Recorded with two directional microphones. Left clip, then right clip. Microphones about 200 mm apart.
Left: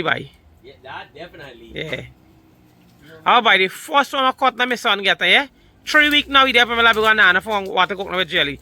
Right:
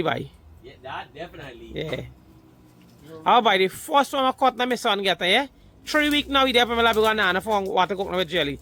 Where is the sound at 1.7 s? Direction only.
10° right (ahead or behind).